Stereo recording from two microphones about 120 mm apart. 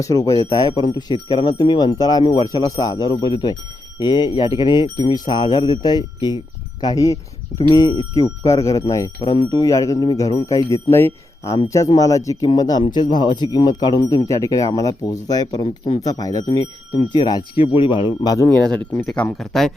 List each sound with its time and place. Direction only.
0.0 s speech: 30° left (ahead or behind)
0.7 s a man's voice: 35° left (ahead or behind)
18.4 s speech: 10° left (ahead or behind)